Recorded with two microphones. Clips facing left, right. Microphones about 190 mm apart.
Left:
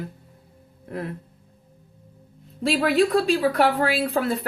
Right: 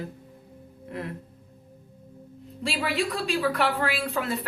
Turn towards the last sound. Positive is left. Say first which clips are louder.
# left 5 dB
turn(degrees=40)  # may be behind; listen again after turning